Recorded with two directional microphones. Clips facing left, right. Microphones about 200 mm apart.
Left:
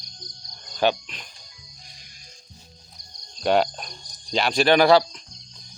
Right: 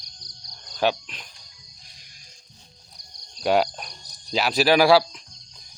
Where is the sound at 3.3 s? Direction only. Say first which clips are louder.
Even; 5° right (ahead or behind).